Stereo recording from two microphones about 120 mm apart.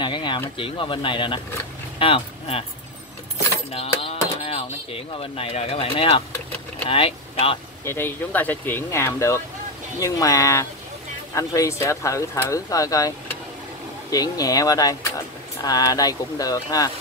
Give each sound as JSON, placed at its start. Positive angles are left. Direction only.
{"t": 0.0, "sound": "speech", "side_deg": 40}
{"t": 3.7, "sound": "a sound", "side_deg": 55}
{"t": 4.4, "sound": "speech", "side_deg": 55}
{"t": 7.8, "sound": "speech", "side_deg": 20}
{"t": 14.1, "sound": "speech", "side_deg": 30}